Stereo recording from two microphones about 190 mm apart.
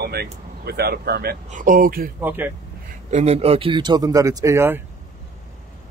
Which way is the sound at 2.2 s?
10° right (ahead or behind).